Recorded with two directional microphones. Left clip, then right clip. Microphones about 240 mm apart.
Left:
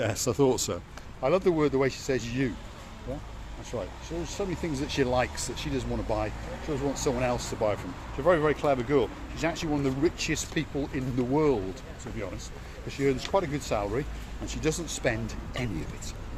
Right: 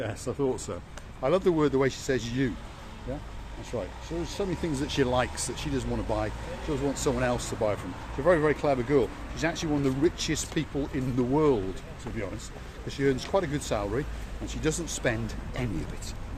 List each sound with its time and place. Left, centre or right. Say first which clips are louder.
0.0 s speech: left 5 dB; left
1.2 s speech: even; centre
3.7 s speech: right 1 dB; centre
13.0 s speech: even; centre